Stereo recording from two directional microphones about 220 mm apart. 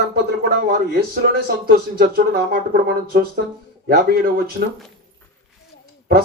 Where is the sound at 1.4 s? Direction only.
40° right (ahead or behind).